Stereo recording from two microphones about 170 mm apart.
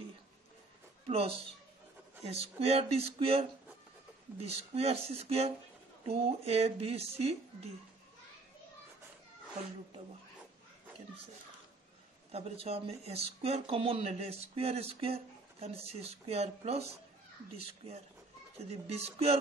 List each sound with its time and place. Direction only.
1.0 s speech: 35° right (ahead or behind)
4.5 s speech: 35° right (ahead or behind)
12.3 s speech: 35° right (ahead or behind)
17.8 s speech: 40° right (ahead or behind)